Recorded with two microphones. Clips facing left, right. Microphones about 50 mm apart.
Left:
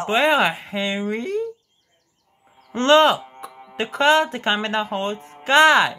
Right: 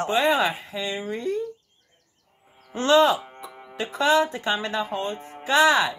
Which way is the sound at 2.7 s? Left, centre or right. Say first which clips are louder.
Left 3 dB; left.